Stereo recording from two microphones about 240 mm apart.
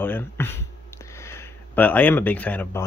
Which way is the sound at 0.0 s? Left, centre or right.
Centre.